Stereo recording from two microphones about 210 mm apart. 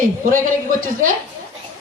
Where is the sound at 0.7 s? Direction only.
40° right (ahead or behind).